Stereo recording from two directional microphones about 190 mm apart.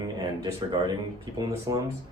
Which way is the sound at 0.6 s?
25° right (ahead or behind).